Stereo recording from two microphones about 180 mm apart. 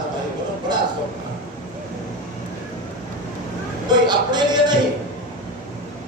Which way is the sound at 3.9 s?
25° right (ahead or behind).